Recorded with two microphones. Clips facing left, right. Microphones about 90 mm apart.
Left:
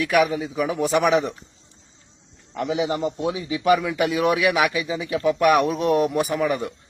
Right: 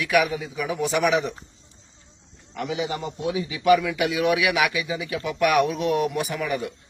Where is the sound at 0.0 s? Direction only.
40° left (ahead or behind).